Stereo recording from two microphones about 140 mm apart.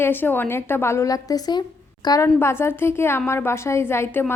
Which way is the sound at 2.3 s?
20° left (ahead or behind).